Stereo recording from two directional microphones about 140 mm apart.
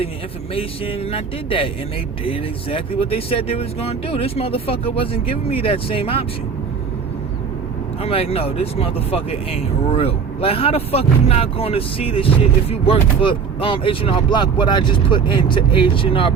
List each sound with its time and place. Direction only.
0.5 s speech: 45° left (ahead or behind)
8.0 s speech: 45° left (ahead or behind)